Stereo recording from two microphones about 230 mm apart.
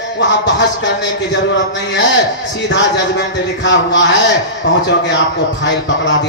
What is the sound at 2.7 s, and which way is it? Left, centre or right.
A man's voice, left.